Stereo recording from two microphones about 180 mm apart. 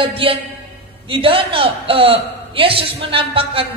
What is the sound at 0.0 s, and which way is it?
A woman's voice, 30° right (ahead or behind).